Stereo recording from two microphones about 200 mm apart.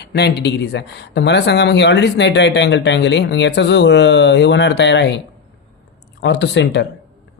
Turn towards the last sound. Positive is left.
turn(degrees=60)  # may be behind; listen again after turning